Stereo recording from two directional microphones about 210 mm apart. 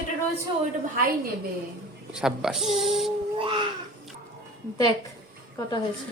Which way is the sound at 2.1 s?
Centre (ahead or behind).